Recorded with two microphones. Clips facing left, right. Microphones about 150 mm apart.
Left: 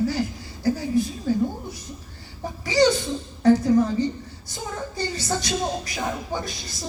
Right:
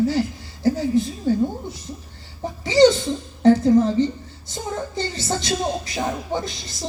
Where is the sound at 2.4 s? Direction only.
20° right (ahead or behind).